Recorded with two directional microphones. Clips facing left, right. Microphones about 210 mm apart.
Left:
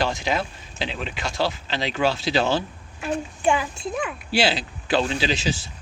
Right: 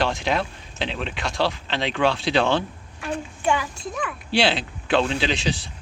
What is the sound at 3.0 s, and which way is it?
Speech, 30° left (ahead or behind).